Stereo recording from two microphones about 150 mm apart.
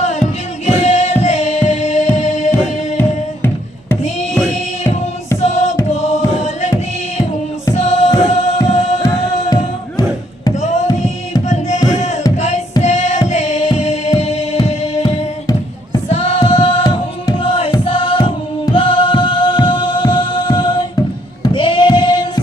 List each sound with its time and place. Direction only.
0.7 s music: 45° left (ahead or behind)
3.0 s music: 15° left (ahead or behind)
5.4 s music: 50° left (ahead or behind)
5.9 s a sound: 50° left (ahead or behind)
7.7 s music: 50° left (ahead or behind)
9.0 s music: 25° left (ahead or behind)
10.5 s music: 50° left (ahead or behind); by 22.4 s 30° left (ahead or behind)